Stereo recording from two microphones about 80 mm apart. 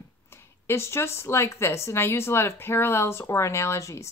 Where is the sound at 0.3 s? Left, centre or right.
Left.